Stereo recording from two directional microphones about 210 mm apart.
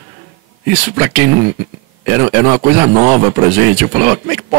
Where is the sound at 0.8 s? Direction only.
10° right (ahead or behind).